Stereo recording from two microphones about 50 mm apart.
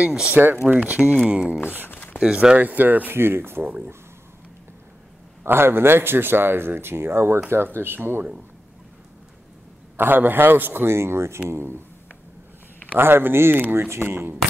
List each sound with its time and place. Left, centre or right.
0.0 s speech: centre
0.7 s speech: right
2.6 s speech: right
3.2 s speech: right
3.6 s speech: right
5.4 s speech: right
9.9 s speech: right
12.9 s speech: right
13.7 s speech: right